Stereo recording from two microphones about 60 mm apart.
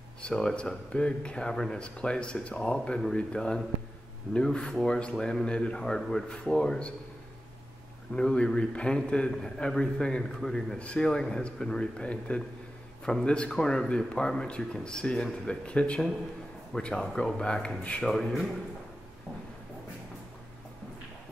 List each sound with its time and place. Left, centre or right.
0.2 s speech: centre
8.1 s speech: centre
18.0 s a man's voice: centre